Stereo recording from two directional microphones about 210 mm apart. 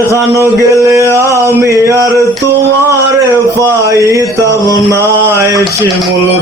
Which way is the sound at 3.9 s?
15° right (ahead or behind).